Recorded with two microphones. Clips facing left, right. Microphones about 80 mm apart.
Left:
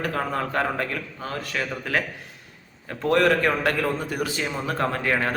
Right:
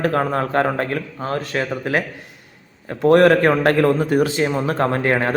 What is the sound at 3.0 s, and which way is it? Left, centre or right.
Speech, right.